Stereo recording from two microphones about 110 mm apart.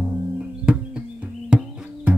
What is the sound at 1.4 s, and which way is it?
Music, 10° right (ahead or behind).